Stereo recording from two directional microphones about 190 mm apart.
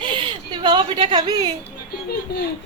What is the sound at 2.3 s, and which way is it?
Speech, 60° left (ahead or behind).